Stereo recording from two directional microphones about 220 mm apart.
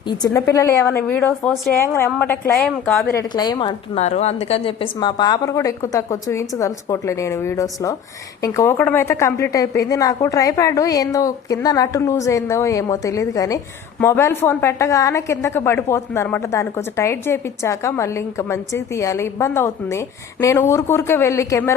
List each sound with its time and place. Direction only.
0.3 s a woman's voice: 15° left (ahead or behind)
3.2 s a woman's voice: 15° left (ahead or behind)